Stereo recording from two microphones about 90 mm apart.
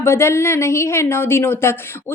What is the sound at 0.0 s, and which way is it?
A woman's voice, 30° left (ahead or behind).